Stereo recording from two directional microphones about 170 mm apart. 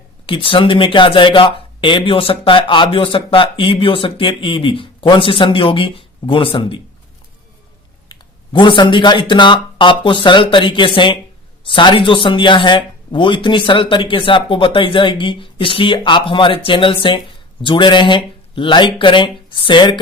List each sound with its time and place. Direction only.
0.3 s speech: 30° left (ahead or behind)
8.1 s speech: 25° left (ahead or behind)